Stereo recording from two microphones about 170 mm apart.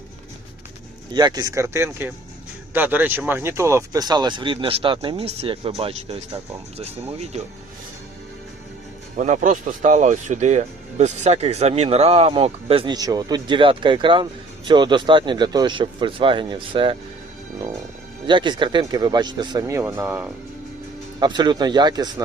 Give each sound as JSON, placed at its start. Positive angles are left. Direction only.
{"t": 1.1, "sound": "speech", "side_deg": -25}
{"t": 9.1, "sound": "speech", "side_deg": -45}
{"t": 18.3, "sound": "speech", "side_deg": -25}
{"t": 21.2, "sound": "speech", "side_deg": -25}